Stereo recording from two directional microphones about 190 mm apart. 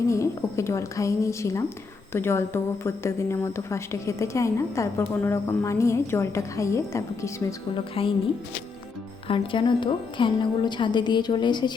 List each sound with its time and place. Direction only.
0.1 s speech: 15° left (ahead or behind)
8.0 s speech: 30° left (ahead or behind)
9.2 s a woman's voice: 25° left (ahead or behind)